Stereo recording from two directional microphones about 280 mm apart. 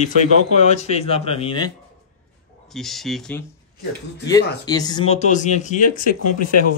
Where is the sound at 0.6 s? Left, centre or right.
Left.